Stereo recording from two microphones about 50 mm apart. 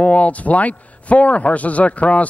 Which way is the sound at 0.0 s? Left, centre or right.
Left.